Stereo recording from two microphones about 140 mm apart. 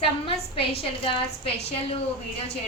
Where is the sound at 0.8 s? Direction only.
45° left (ahead or behind).